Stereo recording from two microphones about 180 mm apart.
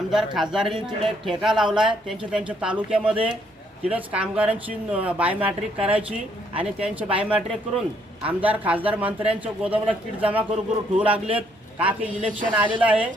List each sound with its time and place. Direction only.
0.1 s speech: centre (ahead or behind)